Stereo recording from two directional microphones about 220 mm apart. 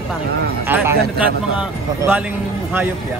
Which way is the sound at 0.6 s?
10° right (ahead or behind).